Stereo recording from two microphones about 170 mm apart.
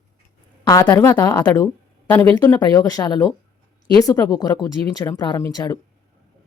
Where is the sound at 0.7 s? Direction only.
15° left (ahead or behind).